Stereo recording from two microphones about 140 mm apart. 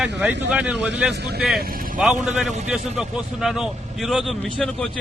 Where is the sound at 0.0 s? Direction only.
5° right (ahead or behind).